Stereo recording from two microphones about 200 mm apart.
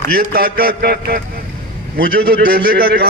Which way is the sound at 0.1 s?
50° right (ahead or behind).